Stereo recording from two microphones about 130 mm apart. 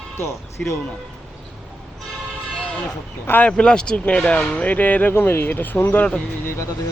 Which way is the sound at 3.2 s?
10° left (ahead or behind).